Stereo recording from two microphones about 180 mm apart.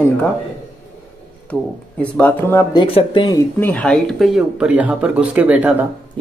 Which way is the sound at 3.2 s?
20° left (ahead or behind).